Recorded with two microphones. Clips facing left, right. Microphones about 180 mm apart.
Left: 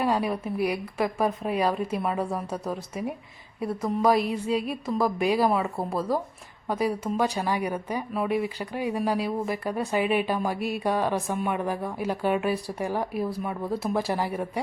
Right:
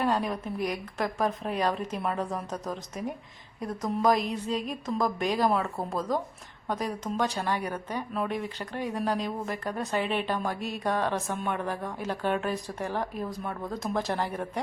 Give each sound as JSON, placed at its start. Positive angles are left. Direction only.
{"t": 0.0, "sound": "speech", "side_deg": 5}